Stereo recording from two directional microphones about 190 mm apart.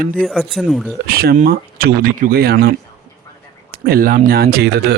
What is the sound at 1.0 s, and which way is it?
Speech, 50° right (ahead or behind).